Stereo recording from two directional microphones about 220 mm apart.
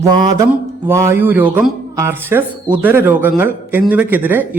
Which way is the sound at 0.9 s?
10° right (ahead or behind).